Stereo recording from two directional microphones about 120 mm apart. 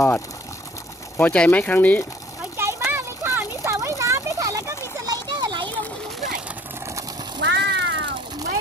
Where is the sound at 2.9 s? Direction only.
20° right (ahead or behind).